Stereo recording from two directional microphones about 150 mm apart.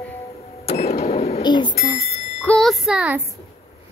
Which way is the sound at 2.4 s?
5° left (ahead or behind).